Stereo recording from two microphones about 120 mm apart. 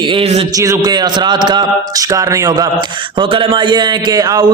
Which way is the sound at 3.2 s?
45° right (ahead or behind).